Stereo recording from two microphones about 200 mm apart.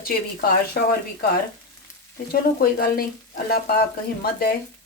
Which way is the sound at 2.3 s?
50° left (ahead or behind).